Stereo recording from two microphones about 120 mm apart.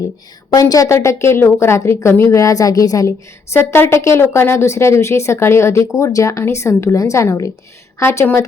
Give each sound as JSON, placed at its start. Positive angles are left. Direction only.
{"t": 0.5, "sound": "speech", "side_deg": 30}